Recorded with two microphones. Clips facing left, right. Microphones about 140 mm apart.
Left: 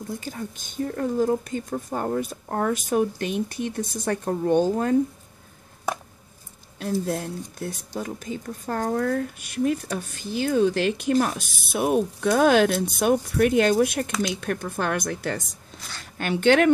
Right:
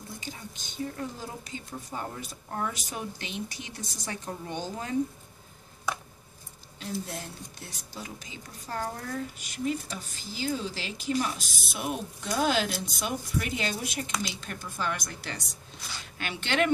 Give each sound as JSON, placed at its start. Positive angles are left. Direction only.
{"t": 0.2, "sound": "speech", "side_deg": 50}
{"t": 6.8, "sound": "speech", "side_deg": 55}